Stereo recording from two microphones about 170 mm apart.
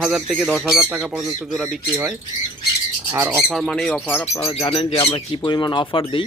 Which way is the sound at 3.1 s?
10° right (ahead or behind).